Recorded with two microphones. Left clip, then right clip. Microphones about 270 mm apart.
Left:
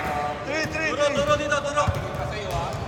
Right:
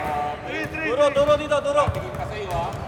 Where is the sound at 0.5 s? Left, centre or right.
Centre.